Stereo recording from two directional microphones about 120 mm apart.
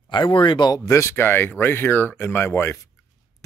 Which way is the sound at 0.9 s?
25° left (ahead or behind).